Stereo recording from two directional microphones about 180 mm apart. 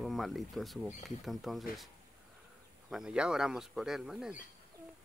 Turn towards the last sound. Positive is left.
turn(degrees=0)  # may be behind; listen again after turning